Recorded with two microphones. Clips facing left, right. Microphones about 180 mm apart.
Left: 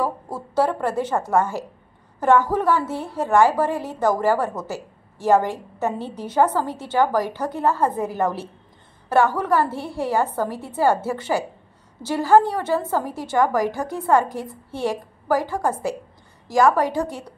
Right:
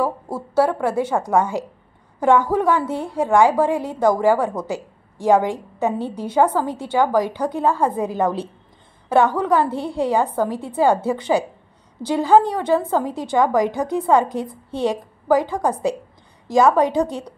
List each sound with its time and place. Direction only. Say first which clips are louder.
0.0 s a woman's voice: right 3 dB; 10° right (ahead or behind)